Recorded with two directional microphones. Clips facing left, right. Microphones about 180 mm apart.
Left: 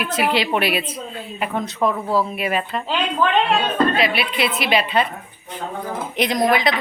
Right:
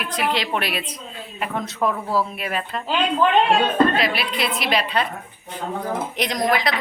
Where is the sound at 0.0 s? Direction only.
5° left (ahead or behind).